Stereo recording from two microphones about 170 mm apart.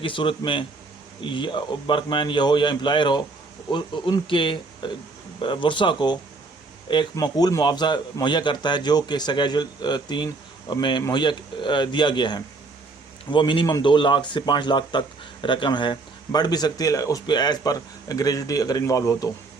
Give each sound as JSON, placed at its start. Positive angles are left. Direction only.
{"t": 0.0, "sound": "a man's voice", "side_deg": 30}